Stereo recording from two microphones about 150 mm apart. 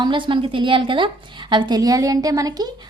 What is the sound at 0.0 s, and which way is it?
A woman's voice, 30° right (ahead or behind).